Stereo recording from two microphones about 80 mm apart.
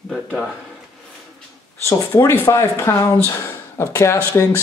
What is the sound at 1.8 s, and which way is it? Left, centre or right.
Speech, left.